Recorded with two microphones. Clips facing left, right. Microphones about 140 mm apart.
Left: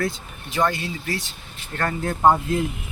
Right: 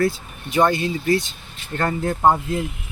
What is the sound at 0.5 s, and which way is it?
Speech, 20° right (ahead or behind).